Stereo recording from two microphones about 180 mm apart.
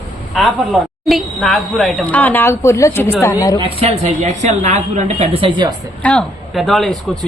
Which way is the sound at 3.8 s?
35° right (ahead or behind).